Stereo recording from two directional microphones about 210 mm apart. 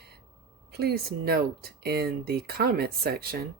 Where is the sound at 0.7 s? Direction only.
50° right (ahead or behind).